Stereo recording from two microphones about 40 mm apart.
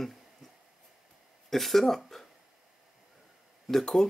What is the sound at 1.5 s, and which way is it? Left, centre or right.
Speech, centre.